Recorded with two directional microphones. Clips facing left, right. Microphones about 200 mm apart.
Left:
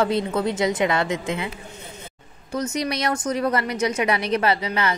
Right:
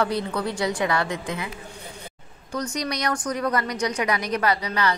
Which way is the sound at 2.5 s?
25° left (ahead or behind).